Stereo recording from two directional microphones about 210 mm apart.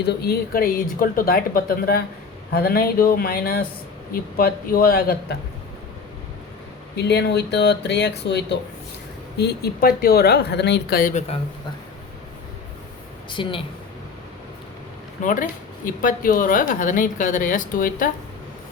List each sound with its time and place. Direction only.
0.0 s speech: 50° left (ahead or behind)
6.9 s speech: 50° left (ahead or behind)
13.3 s speech: 25° left (ahead or behind)
15.2 s a woman's voice: 40° left (ahead or behind)